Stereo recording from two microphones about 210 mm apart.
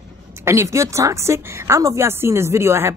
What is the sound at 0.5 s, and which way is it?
A woman's voice, 15° right (ahead or behind).